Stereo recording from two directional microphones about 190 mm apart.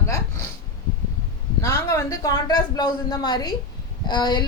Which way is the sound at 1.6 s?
15° left (ahead or behind).